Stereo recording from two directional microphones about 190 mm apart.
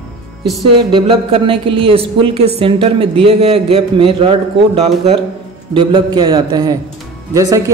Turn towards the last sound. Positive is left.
turn(degrees=-15)  # may be behind; listen again after turning